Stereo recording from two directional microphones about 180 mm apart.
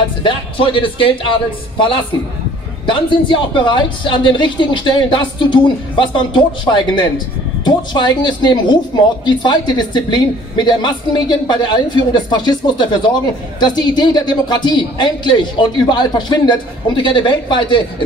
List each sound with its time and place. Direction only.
0.2 s speech: 30° left (ahead or behind)